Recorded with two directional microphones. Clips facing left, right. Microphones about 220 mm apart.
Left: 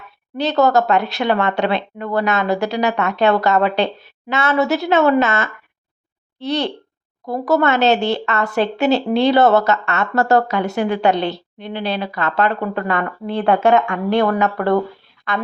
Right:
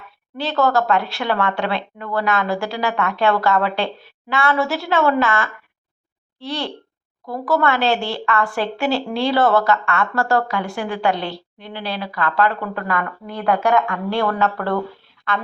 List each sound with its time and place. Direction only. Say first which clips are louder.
0.3 s a woman's voice: left 3 dB; 20° left (ahead or behind)